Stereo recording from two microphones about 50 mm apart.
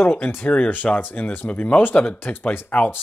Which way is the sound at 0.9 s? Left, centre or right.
Left.